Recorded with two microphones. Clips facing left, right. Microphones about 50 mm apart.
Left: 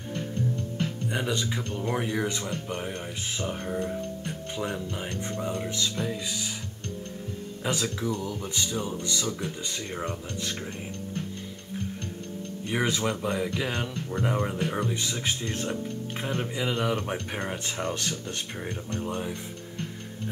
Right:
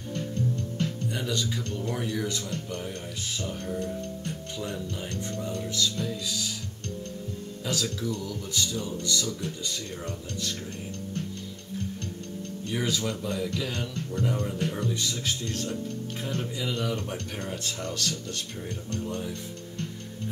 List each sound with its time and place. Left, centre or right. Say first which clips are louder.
1.1 s speech: left 2 dB; left
7.6 s speech: left 2 dB; left
12.7 s speech: left 3 dB; left